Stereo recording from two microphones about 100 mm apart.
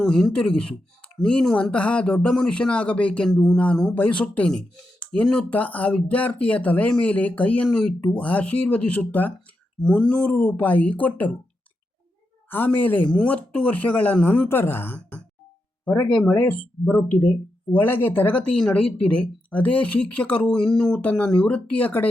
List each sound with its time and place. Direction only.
0.0 s speech: 5° left (ahead or behind)
12.5 s a woman's voice: 20° left (ahead or behind)